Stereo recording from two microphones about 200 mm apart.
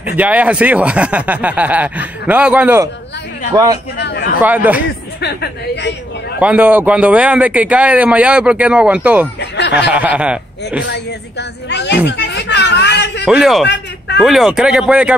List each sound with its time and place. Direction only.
0.0 s a man's voice: 10° right (ahead or behind)
4.0 s speech: 55° left (ahead or behind)
4.4 s a man's voice: 10° right (ahead or behind)
5.2 s speech: 60° left (ahead or behind)
6.4 s a man's voice: 5° right (ahead or behind)
9.4 s speech: 60° left (ahead or behind)
9.8 s a man's voice: 5° right (ahead or behind)
10.9 s speech: 60° left (ahead or behind)
12.1 s a sound: 60° left (ahead or behind)
13.2 s a man's voice: 5° right (ahead or behind)